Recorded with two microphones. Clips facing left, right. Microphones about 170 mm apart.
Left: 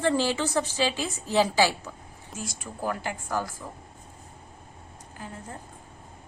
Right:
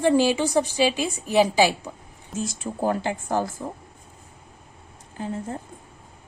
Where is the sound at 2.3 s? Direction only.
25° right (ahead or behind).